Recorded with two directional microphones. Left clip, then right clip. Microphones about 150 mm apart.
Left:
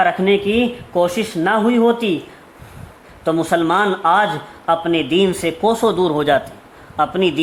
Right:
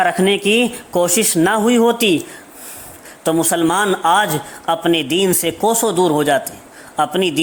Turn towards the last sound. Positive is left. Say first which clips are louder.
# even
turn(degrees=-20)  # may be behind; listen again after turning